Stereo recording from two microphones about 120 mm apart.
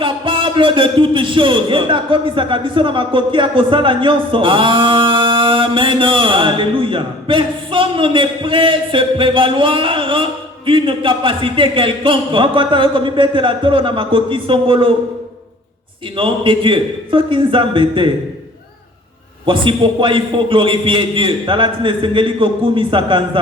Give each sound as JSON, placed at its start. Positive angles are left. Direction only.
{"t": 0.0, "sound": "a man's voice", "side_deg": -45}
{"t": 16.1, "sound": "a man's voice", "side_deg": -45}
{"t": 19.5, "sound": "a man's voice", "side_deg": -45}